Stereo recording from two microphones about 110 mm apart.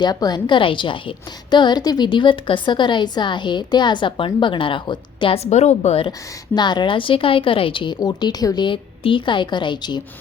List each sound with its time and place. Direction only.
0.0 s a woman's voice: 40° left (ahead or behind); by 6.1 s 75° left (ahead or behind)
6.1 s a woman's voice: 40° left (ahead or behind)